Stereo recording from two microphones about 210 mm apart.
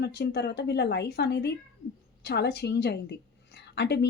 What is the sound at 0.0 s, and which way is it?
Speech, 55° left (ahead or behind).